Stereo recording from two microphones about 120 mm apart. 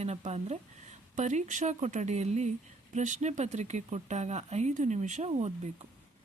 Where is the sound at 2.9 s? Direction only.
85° right; by 5.8 s 70° right (ahead or behind).